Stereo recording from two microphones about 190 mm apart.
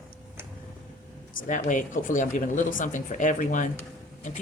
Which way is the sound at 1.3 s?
45° left (ahead or behind).